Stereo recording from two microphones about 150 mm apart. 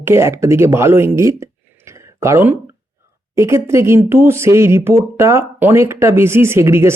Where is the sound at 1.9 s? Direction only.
20° right (ahead or behind).